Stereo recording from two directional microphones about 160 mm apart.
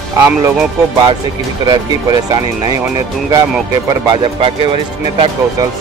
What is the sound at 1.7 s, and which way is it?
Speech, 25° right (ahead or behind).